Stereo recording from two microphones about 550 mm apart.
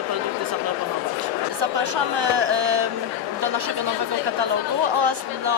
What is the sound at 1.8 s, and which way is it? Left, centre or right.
Speech, right.